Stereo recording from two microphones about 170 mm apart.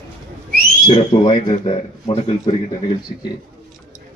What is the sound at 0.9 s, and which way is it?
Speech, 30° left (ahead or behind).